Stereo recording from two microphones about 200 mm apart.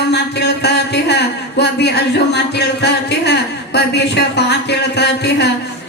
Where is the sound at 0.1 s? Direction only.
55° left (ahead or behind).